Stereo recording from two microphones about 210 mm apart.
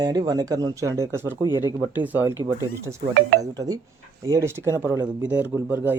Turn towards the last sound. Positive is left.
turn(degrees=-10)  # may be behind; listen again after turning